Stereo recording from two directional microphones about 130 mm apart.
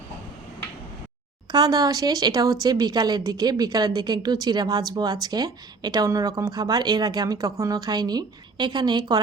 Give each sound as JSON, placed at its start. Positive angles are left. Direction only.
{"t": 1.5, "sound": "a woman's voice", "side_deg": -30}